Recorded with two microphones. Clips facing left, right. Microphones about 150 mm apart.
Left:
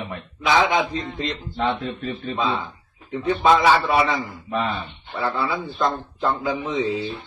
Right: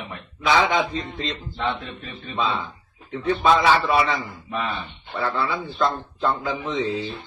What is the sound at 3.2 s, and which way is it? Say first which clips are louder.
Speech: left 1 dB; 15° left (ahead or behind).